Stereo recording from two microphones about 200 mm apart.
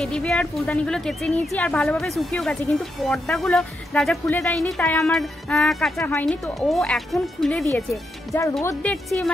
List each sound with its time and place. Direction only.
0.0 s speech: 5° left (ahead or behind)